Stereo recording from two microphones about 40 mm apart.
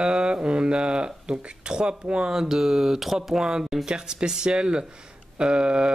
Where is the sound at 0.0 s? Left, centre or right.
Right.